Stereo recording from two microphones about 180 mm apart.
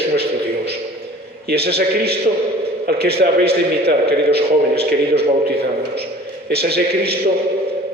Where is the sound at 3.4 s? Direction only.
65° right (ahead or behind).